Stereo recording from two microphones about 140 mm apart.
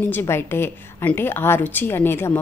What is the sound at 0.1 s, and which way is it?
A woman's voice, 15° left (ahead or behind).